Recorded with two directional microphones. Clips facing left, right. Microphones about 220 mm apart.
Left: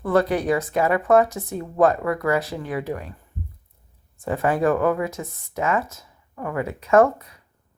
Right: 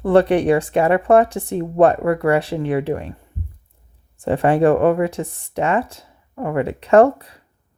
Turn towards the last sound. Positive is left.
turn(degrees=-30)  # may be behind; listen again after turning